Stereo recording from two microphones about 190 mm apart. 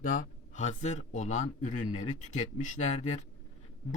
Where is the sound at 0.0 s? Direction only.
45° left (ahead or behind).